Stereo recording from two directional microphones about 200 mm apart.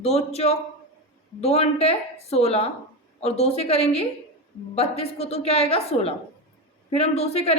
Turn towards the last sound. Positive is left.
turn(degrees=30)  # may be behind; listen again after turning